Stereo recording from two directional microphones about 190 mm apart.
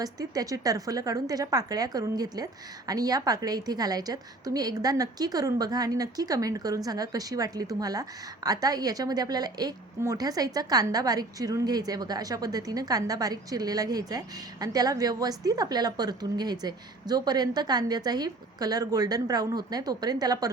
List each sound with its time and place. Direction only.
0.0 s a woman's voice: 20° right (ahead or behind)